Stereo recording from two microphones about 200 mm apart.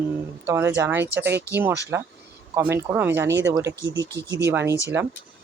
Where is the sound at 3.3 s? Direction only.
60° right (ahead or behind).